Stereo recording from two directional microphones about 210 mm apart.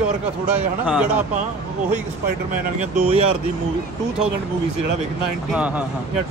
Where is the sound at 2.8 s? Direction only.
30° right (ahead or behind).